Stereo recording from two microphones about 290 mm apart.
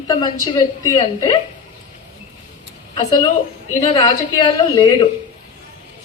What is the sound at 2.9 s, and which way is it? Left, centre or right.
A woman's voice, centre.